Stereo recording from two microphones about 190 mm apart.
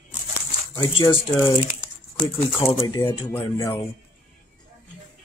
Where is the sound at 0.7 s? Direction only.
25° left (ahead or behind).